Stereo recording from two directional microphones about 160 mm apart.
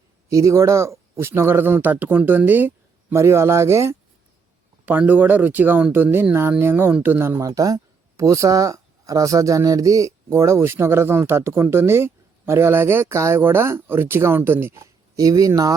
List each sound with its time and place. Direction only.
0.3 s speech: 20° right (ahead or behind)